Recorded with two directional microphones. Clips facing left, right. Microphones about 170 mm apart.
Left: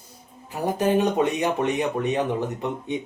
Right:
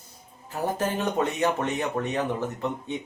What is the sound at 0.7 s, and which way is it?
Speech, 15° left (ahead or behind).